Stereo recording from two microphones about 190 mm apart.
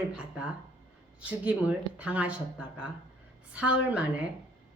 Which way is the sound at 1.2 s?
5° right (ahead or behind).